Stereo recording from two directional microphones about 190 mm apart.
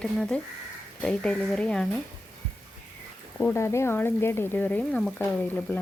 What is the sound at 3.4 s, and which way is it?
Speech, 15° left (ahead or behind).